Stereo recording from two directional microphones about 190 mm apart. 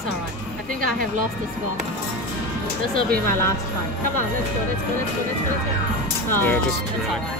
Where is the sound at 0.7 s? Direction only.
45° right (ahead or behind).